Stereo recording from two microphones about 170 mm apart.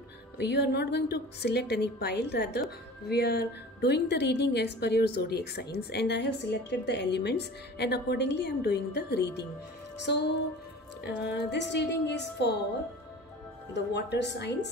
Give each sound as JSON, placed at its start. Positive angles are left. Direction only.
{"t": 0.4, "sound": "a woman's voice", "side_deg": 80}
{"t": 11.1, "sound": "a woman's voice", "side_deg": 80}
{"t": 13.7, "sound": "a woman's voice", "side_deg": 85}